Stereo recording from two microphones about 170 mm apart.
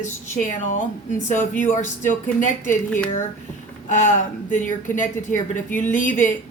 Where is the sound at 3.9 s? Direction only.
45° left (ahead or behind).